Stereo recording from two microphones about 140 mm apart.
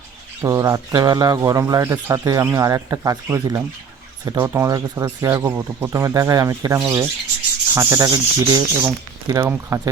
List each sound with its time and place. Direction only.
0.4 s speech: 20° right (ahead or behind)